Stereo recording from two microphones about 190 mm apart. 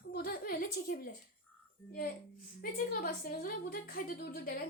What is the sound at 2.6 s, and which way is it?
A woman's voice, 50° left (ahead or behind).